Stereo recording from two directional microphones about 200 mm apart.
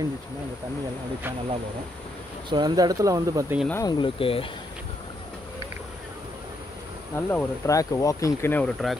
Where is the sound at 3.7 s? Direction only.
15° left (ahead or behind).